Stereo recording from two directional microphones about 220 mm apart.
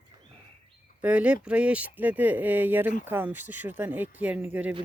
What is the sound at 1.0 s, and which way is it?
Speech, 5° right (ahead or behind).